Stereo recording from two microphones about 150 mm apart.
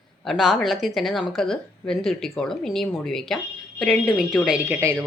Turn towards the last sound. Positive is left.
turn(degrees=-20)  # may be behind; listen again after turning